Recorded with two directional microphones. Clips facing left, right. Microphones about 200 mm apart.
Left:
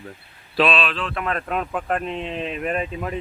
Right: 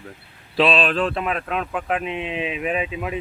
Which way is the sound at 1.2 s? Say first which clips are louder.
Even; centre (ahead or behind).